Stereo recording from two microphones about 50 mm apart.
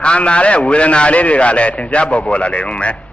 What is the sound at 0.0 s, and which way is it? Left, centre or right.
A man's voice, left.